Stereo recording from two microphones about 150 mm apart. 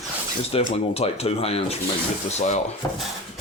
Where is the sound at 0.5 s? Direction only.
40° left (ahead or behind).